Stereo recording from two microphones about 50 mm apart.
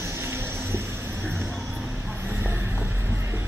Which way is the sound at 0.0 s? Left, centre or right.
Right.